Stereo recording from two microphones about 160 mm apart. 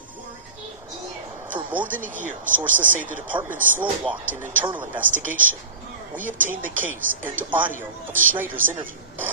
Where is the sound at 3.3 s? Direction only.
30° right (ahead or behind).